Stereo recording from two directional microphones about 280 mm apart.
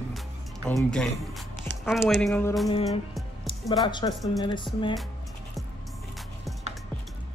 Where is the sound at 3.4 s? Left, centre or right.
Centre.